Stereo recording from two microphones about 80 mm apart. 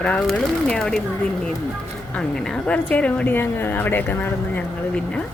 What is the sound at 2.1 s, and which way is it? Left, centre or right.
A woman's voice, centre.